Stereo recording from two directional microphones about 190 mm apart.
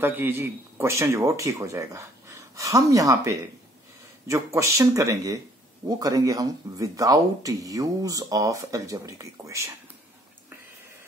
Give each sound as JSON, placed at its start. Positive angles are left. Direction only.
{"t": 0.0, "sound": "speech", "side_deg": -10}